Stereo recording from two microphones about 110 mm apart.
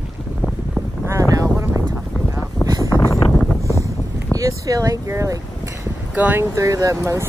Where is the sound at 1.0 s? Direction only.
30° right (ahead or behind).